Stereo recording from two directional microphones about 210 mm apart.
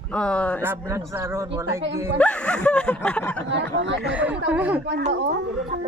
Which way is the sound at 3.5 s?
60° right (ahead or behind).